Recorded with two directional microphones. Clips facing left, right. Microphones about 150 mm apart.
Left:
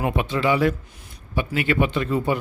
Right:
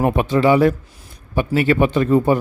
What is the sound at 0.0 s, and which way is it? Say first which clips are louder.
A man's voice: right 7 dB; 45° right (ahead or behind).